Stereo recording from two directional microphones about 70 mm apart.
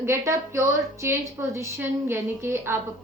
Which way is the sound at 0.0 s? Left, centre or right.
Right.